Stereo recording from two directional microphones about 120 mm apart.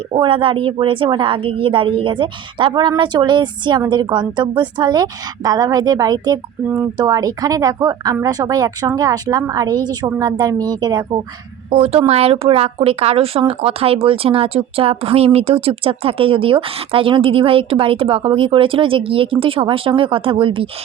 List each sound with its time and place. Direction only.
0.1 s a woman's voice: 45° right (ahead or behind)
11.7 s speech: 50° right (ahead or behind)